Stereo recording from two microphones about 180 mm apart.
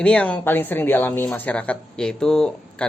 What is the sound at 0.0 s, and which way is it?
Speech, 5° left (ahead or behind).